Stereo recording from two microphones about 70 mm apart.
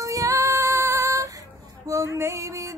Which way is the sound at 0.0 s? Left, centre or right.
Right.